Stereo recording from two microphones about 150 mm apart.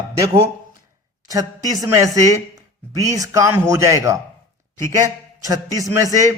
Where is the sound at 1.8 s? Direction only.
20° right (ahead or behind).